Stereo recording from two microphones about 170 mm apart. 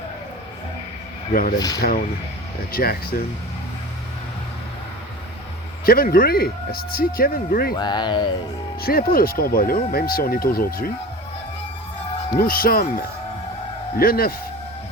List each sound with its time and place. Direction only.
1.3 s speech: 50° left (ahead or behind)
1.5 s speech: 20° left (ahead or behind)
2.7 s speech: 65° left (ahead or behind)
5.8 s speech: 60° left (ahead or behind)
7.8 s speech: 25° left (ahead or behind)
8.8 s speech: 60° left (ahead or behind)
12.4 s speech: 55° left (ahead or behind)
13.9 s speech: 60° left (ahead or behind)